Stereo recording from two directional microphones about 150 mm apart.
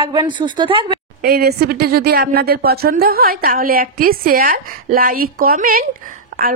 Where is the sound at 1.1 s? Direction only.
90° right.